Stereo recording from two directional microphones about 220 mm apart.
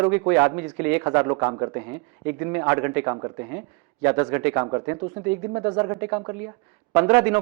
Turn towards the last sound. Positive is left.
turn(degrees=-10)  # may be behind; listen again after turning